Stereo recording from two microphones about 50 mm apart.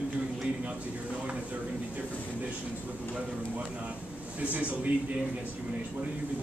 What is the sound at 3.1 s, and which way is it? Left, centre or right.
A man's voice, right.